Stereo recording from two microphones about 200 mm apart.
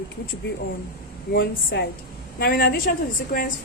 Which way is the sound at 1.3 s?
50° left (ahead or behind).